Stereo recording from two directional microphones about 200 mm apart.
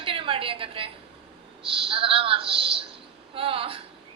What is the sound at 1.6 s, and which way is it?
A woman's voice, 25° right (ahead or behind).